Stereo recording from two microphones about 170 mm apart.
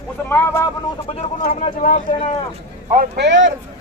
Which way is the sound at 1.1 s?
45° left (ahead or behind).